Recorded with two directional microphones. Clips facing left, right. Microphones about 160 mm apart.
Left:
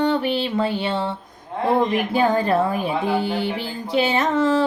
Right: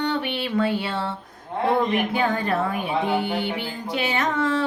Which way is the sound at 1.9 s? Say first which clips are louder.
Left 3 dB; 35° left (ahead or behind).